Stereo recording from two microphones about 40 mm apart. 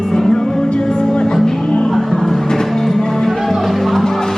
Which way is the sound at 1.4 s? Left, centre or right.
Centre.